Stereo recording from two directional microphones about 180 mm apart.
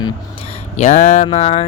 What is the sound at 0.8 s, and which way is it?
Mantra, 45° left (ahead or behind).